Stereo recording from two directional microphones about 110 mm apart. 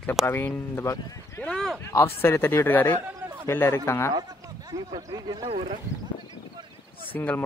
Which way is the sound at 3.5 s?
20° left (ahead or behind).